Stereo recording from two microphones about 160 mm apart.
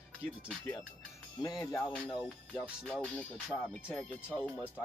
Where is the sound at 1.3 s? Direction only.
20° left (ahead or behind).